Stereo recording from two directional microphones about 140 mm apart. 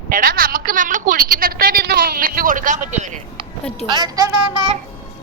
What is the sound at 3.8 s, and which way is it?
Speech, 30° right (ahead or behind).